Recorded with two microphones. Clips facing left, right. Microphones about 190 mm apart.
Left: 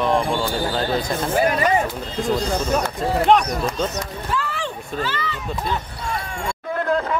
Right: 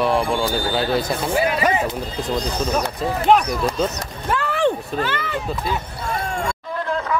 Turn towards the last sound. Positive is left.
turn(degrees=-55)  # may be behind; listen again after turning